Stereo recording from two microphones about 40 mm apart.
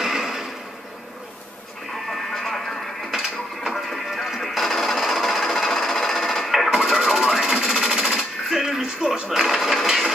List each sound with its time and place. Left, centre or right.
0.0 s a sound: centre
2.0 s a sound: centre
3.6 s music: centre
5.8 s sewing machine: centre
7.0 s radio: centre
7.7 s jackhammer: centre
8.8 s television: centre
9.3 s mechanisms: centre